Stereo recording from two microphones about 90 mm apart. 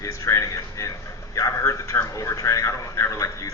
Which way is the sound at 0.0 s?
35° left (ahead or behind).